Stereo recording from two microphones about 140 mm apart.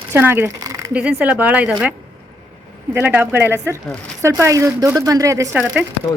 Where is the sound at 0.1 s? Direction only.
15° right (ahead or behind).